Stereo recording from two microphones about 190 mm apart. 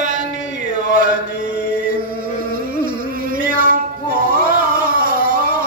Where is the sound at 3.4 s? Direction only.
45° right (ahead or behind).